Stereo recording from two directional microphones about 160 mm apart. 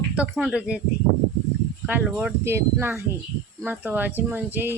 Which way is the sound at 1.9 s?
10° right (ahead or behind).